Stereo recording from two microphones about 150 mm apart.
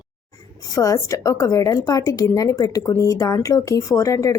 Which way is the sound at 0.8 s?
20° left (ahead or behind).